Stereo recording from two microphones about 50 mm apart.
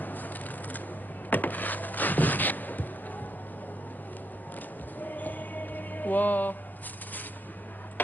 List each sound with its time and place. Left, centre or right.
0.0 s a sound: left
1.3 s music: left
4.9 s music: left